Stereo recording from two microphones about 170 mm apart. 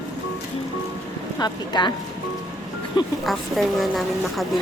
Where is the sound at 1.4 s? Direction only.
25° left (ahead or behind).